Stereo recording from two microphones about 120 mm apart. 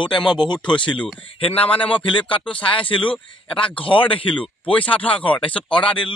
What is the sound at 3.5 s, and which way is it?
Speech, 45° left (ahead or behind).